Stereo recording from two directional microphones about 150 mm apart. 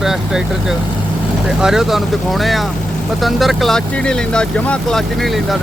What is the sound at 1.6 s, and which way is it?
Speech, 5° right (ahead or behind).